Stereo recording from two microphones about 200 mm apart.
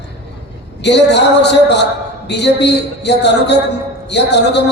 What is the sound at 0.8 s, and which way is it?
A man's voice, 60° left (ahead or behind).